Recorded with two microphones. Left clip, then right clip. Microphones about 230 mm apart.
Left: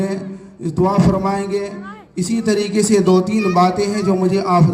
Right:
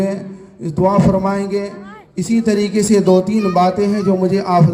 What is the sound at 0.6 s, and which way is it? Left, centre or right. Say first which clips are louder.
A man's voice: right 2 dB; right.